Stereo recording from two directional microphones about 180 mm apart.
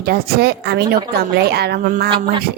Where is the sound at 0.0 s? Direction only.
60° right (ahead or behind).